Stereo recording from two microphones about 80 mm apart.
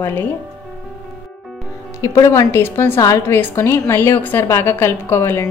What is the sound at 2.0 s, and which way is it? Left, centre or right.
Speech, left.